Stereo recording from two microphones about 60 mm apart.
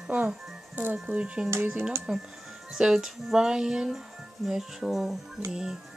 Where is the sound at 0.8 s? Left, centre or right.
Right; by 5.1 s centre.